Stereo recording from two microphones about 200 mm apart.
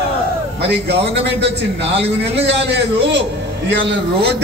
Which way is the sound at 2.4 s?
55° right (ahead or behind).